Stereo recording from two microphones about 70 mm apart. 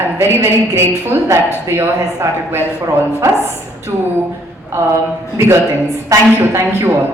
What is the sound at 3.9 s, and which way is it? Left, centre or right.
Speech, right.